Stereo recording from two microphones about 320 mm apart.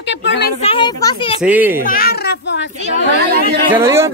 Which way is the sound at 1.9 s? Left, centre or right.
Left.